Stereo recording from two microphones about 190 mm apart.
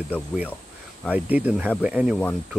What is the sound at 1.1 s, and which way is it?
Speech, 10° right (ahead or behind).